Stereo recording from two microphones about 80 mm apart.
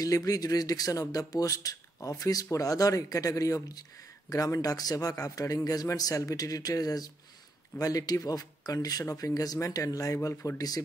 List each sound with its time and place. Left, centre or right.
0.0 s speech: left